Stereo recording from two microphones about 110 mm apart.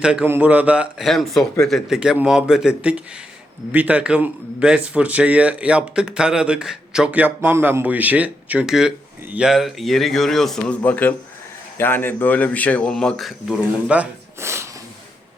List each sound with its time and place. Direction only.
0.0 s speech: 10° right (ahead or behind)
1.0 s a man's voice: centre (ahead or behind)
2.0 s a man's voice: 10° right (ahead or behind)
14.3 s a sound: 25° right (ahead or behind)